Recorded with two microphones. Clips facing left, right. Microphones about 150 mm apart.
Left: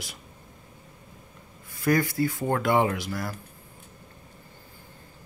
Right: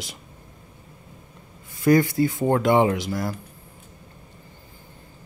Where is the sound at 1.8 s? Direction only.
20° right (ahead or behind).